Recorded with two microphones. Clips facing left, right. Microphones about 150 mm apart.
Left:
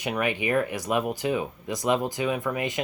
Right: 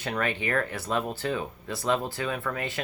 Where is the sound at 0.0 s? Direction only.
15° left (ahead or behind).